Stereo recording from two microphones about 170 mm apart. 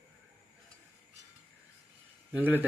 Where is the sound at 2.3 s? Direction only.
10° right (ahead or behind).